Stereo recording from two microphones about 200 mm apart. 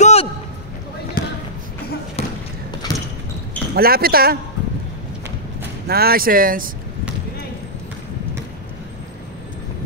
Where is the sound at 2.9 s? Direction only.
20° left (ahead or behind).